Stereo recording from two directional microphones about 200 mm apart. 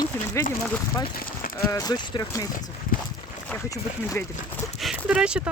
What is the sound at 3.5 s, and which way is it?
Speech, 15° left (ahead or behind).